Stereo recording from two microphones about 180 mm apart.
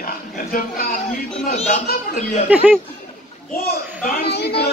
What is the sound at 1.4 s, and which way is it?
Speech, 40° left (ahead or behind).